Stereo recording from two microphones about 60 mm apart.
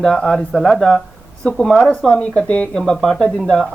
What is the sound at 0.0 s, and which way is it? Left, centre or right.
Speech, centre.